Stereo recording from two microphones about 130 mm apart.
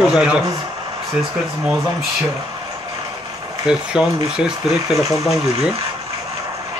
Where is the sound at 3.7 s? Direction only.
5° right (ahead or behind).